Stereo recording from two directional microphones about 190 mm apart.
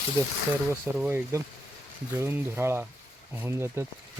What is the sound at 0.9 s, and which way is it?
Speech, 10° right (ahead or behind).